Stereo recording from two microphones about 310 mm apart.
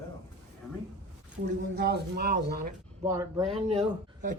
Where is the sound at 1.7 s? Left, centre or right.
Right.